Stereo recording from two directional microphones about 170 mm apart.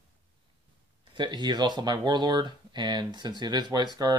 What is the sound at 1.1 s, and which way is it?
Speech, 25° right (ahead or behind).